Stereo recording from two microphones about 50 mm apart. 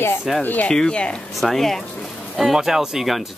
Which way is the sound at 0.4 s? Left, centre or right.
Left.